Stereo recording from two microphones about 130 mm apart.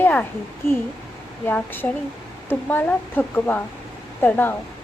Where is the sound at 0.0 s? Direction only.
15° left (ahead or behind).